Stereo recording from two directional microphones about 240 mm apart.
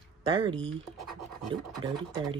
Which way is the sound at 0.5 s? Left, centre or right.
Centre.